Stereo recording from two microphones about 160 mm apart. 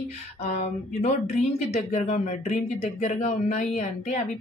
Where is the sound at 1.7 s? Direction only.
40° left (ahead or behind).